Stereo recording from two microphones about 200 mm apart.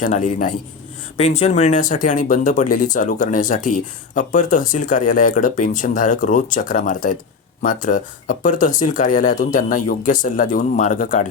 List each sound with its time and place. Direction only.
0.0 s speech: 40° left (ahead or behind)